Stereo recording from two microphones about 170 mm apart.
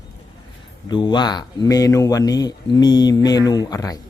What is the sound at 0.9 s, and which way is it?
Speech, 25° left (ahead or behind).